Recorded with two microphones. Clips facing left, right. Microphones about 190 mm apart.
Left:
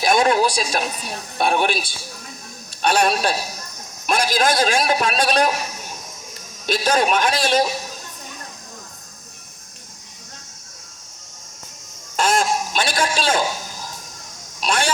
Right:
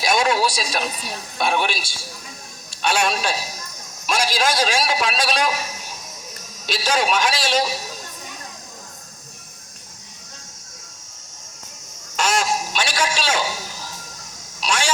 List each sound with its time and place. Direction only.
0.0 s a woman's voice: 50° left (ahead or behind)
3.0 s a man's voice: 45° left (ahead or behind)
6.7 s a man's voice: 50° left (ahead or behind)
12.1 s a sound: 50° left (ahead or behind)
14.6 s speech: 55° left (ahead or behind)